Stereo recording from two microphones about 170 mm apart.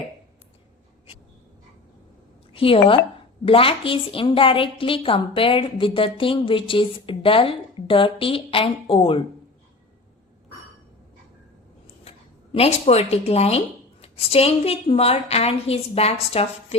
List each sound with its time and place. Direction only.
2.5 s a woman's voice: 30° left (ahead or behind)
12.0 s a woman's voice: 35° left (ahead or behind)